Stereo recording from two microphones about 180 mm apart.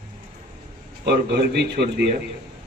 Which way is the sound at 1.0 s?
65° right (ahead or behind).